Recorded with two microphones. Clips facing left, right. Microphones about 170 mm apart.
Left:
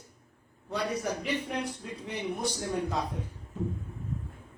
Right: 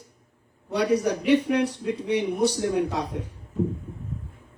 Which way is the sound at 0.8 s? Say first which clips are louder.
Right 9 dB; 75° right (ahead or behind).